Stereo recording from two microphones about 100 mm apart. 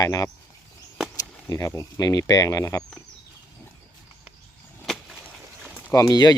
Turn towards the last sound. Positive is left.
turn(degrees=40)  # may be behind; listen again after turning